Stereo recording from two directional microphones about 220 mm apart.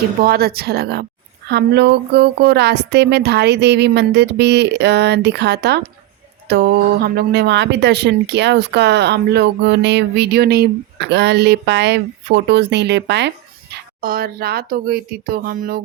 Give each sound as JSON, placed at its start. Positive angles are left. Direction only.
{"t": 0.2, "sound": "speech", "side_deg": -45}